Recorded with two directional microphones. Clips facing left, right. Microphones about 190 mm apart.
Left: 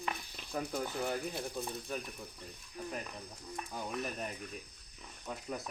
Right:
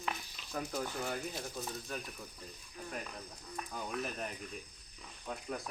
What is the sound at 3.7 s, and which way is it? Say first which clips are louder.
Speech: even; 5° left (ahead or behind).